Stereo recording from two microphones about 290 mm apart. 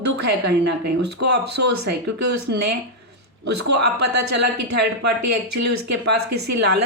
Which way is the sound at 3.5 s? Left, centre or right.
Right.